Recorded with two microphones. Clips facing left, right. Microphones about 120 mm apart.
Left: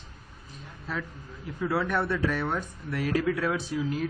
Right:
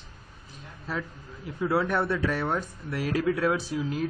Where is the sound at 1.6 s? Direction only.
15° right (ahead or behind).